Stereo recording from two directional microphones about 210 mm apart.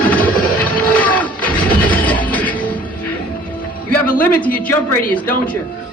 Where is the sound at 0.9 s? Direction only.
5° left (ahead or behind).